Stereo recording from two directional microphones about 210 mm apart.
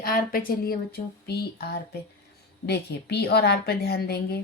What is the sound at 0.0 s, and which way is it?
A woman's voice, 45° left (ahead or behind).